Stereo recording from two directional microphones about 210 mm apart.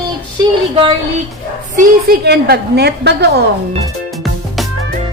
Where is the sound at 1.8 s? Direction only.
45° right (ahead or behind).